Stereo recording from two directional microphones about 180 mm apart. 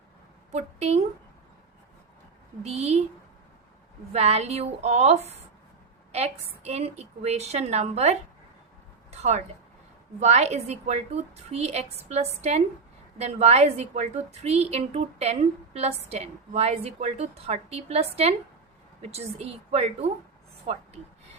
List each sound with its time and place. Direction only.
0.5 s a woman's voice: 40° right (ahead or behind)
2.6 s a woman's voice: 35° right (ahead or behind)
4.1 s a woman's voice: 35° right (ahead or behind)
9.0 s a sound: 40° right (ahead or behind)
10.2 s a woman's voice: 40° right (ahead or behind)